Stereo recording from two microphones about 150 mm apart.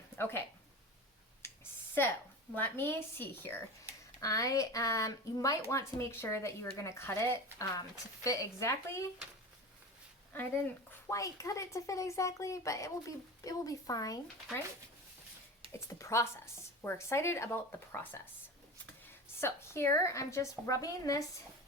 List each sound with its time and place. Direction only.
0.2 s speech: 15° left (ahead or behind)
1.4 s a sound: 15° left (ahead or behind)
2.6 s speech: 15° left (ahead or behind)
11.1 s speech: 20° left (ahead or behind)
16.0 s speech: 20° left (ahead or behind)
19.4 s speech: 15° left (ahead or behind)